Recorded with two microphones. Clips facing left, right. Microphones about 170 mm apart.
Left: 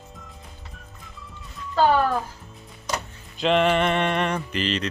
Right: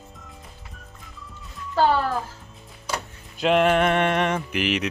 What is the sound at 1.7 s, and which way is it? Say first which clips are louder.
Speech: left 1 dB; 15° left (ahead or behind).